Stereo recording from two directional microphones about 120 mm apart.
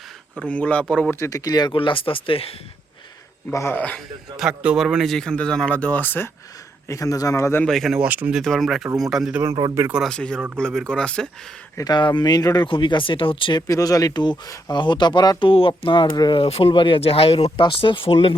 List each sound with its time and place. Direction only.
0.3 s speech: 10° left (ahead or behind)
1.2 s speech: 30° left (ahead or behind); by 2.6 s 50° left (ahead or behind)
3.5 s speech: 20° left (ahead or behind)
4.4 s a man's voice: 5° right (ahead or behind); by 6.3 s 15° left (ahead or behind)
6.8 s speech: 25° left (ahead or behind)
7.6 s a man's voice: centre (ahead or behind)
7.9 s speech: 10° right (ahead or behind)
8.4 s a man's voice: centre (ahead or behind)
9.4 s a man's voice: 25° right (ahead or behind)
10.1 s speech: 5° left (ahead or behind)
11.8 s speech: 40° left (ahead or behind)
12.6 s speech: 45° left (ahead or behind)
13.6 s speech: 30° left (ahead or behind)
16.4 s speech: 55° left (ahead or behind)